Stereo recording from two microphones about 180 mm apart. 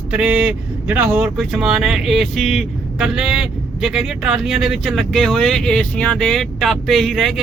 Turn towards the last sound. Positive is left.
turn(degrees=0)  # may be behind; listen again after turning